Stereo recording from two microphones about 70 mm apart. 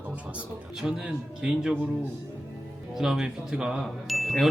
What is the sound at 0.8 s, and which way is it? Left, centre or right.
Speech, centre.